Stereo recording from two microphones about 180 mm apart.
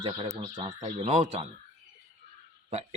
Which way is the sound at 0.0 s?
30° right (ahead or behind).